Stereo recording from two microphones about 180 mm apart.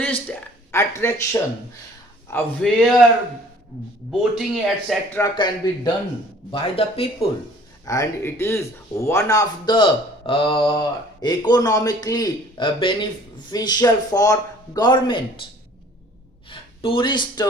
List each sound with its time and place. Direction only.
0.3 s speech: 15° left (ahead or behind)
2.6 s speech: centre (ahead or behind)
4.1 s speech: centre (ahead or behind)
5.1 s speech: 20° left (ahead or behind)
7.9 s speech: 15° left (ahead or behind)
16.5 s speech: 30° left (ahead or behind)